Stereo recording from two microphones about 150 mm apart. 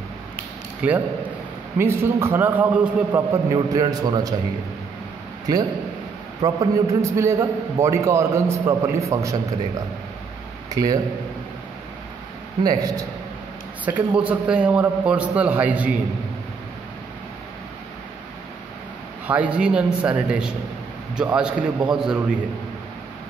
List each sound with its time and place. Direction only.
0.8 s a man's voice: 10° right (ahead or behind)
3.2 s a man's voice: 25° right (ahead or behind)
6.4 s a man's voice: 25° right (ahead or behind)
10.7 s speech: 25° right (ahead or behind)
12.6 s a man's voice: 25° right (ahead or behind)
13.8 s a man's voice: 10° right (ahead or behind)
19.2 s a man's voice: 10° right (ahead or behind)